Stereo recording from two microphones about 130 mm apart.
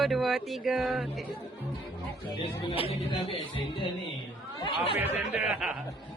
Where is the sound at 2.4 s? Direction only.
45° left (ahead or behind).